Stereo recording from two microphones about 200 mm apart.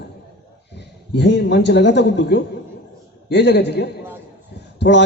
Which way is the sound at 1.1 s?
60° left (ahead or behind).